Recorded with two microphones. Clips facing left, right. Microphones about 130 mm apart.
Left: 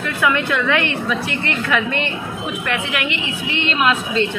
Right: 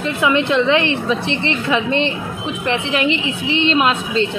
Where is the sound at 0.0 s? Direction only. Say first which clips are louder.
Right 3 dB; 25° right (ahead or behind).